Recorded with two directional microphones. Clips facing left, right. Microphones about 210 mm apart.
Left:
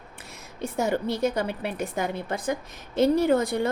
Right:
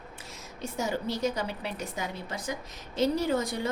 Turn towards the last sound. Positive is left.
turn(degrees=55)  # may be behind; listen again after turning